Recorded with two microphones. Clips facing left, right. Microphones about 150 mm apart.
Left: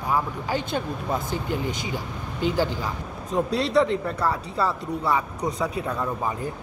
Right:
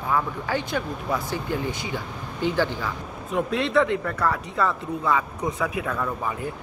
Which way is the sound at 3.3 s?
35° left (ahead or behind).